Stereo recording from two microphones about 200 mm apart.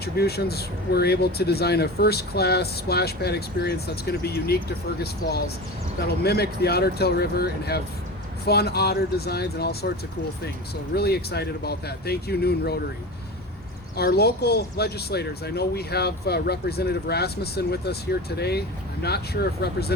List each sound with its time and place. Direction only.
0.0 s speech: 55° left (ahead or behind)
10.9 s speech: 55° left (ahead or behind)
13.9 s speech: 50° left (ahead or behind)